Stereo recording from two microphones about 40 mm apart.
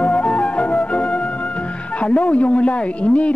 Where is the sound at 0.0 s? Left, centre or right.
Left.